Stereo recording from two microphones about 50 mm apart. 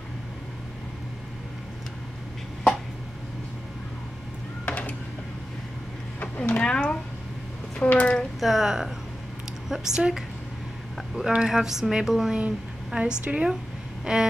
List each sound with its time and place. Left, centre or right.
4.6 s a sound: left
6.5 s a sound: centre
8.4 s speech: centre
11.3 s a woman's voice: centre
12.4 s speech: right
14.1 s a woman's voice: centre